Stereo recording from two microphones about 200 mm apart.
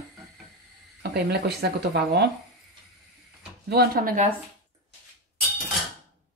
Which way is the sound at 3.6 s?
50° right (ahead or behind).